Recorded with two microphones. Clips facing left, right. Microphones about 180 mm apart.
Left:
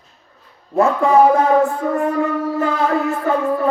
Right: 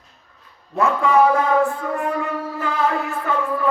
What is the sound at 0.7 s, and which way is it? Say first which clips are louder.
Music: left 4 dB; 35° left (ahead or behind).